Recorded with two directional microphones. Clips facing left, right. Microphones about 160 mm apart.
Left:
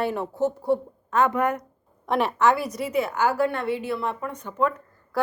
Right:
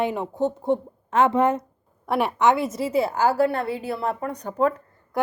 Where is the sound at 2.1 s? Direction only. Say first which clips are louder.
Right 1 dB; 10° right (ahead or behind); by 4.7 s 35° right (ahead or behind).